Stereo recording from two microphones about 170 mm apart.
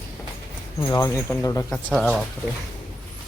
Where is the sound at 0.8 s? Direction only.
20° left (ahead or behind).